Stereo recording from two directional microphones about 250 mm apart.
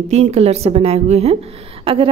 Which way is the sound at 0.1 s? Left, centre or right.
Right.